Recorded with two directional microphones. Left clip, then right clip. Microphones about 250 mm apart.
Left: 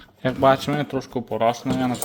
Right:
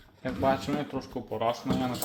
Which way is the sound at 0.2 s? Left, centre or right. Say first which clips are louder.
Left 10 dB; left.